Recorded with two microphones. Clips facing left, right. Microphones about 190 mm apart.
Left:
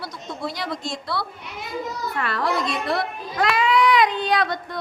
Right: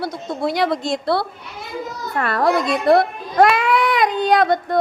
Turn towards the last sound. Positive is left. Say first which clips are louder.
# right 8 dB
turn(degrees=-50)  # may be behind; listen again after turning